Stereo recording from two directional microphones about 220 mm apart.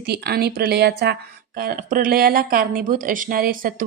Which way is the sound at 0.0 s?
45° right (ahead or behind).